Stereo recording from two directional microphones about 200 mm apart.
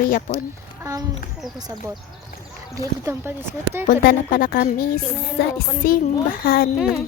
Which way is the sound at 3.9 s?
45° left (ahead or behind).